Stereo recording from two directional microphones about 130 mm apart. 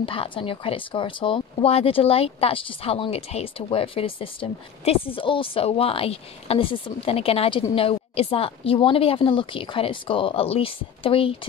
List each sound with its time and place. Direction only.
0.0 s speech: 45° left (ahead or behind)